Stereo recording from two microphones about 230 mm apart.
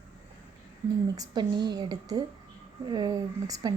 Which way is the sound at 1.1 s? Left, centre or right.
Centre.